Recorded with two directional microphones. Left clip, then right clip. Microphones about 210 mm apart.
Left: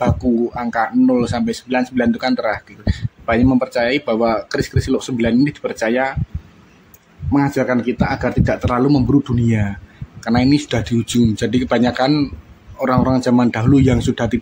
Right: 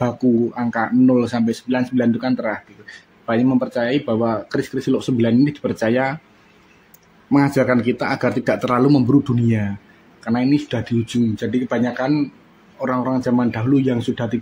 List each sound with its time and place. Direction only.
0.0 s speech: 10° left (ahead or behind)
7.2 s speech: centre (ahead or behind); by 14.4 s 15° left (ahead or behind)